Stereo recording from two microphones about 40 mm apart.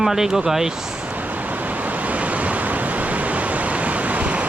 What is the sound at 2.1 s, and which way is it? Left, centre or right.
Waves, right.